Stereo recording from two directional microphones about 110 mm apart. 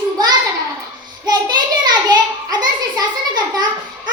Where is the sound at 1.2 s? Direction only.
40° right (ahead or behind).